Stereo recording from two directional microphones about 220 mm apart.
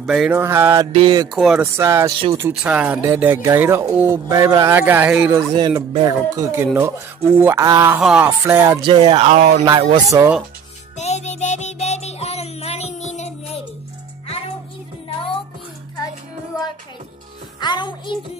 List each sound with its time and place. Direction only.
0.0 s speech: 5° right (ahead or behind)
0.9 s speech: 20° right (ahead or behind)
1.3 s speech: centre (ahead or behind)
1.8 s speech: 10° right (ahead or behind)
2.1 s speech: 25° right (ahead or behind)
2.4 s speech: 5° right (ahead or behind)
11.0 s music: 30° left (ahead or behind)
15.0 s music: 25° left (ahead or behind)
17.6 s music: 20° left (ahead or behind)